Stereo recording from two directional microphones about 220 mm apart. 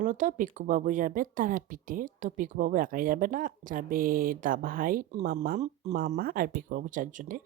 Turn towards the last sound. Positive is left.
turn(degrees=-35)  # may be behind; listen again after turning